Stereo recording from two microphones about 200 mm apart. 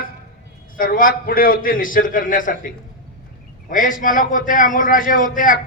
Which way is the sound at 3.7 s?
40° left (ahead or behind).